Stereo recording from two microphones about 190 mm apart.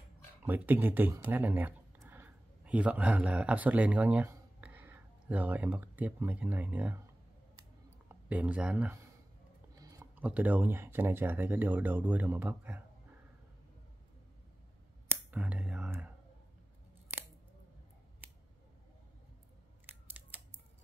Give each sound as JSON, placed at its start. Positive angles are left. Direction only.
{"t": 0.4, "sound": "speech", "side_deg": -10}
{"t": 8.1, "sound": "speech", "side_deg": -10}
{"t": 9.8, "sound": "a sound", "side_deg": -15}
{"t": 10.2, "sound": "speech", "side_deg": -10}
{"t": 15.0, "sound": "whispering", "side_deg": -10}
{"t": 19.9, "sound": "scissors", "side_deg": -10}